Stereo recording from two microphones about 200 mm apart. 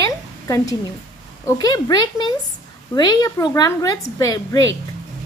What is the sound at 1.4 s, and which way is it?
A woman's voice, 20° left (ahead or behind).